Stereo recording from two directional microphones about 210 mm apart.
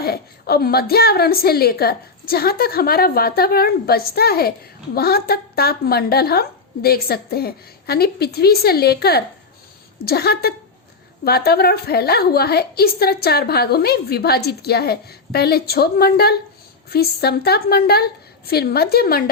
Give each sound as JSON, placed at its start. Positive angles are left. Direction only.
{"t": 0.0, "sound": "a woman's voice", "side_deg": 50}